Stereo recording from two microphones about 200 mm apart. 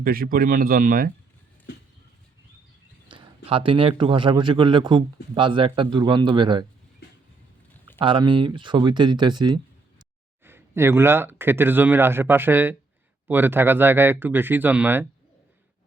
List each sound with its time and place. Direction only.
0.0 s speech: 45° right (ahead or behind)
3.1 s speech: 25° right (ahead or behind)
7.9 s speech: 25° right (ahead or behind)
10.4 s speech: 10° right (ahead or behind)